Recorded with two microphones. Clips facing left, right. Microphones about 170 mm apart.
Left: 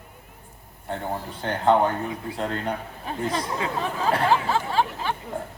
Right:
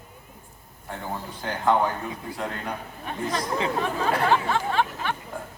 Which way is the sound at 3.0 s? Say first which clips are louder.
Even; 30° left (ahead or behind).